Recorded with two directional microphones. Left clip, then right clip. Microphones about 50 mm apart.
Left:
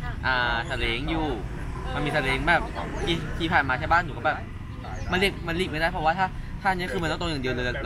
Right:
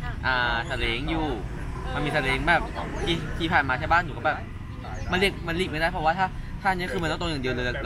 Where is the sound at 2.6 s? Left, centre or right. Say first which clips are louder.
Even; centre.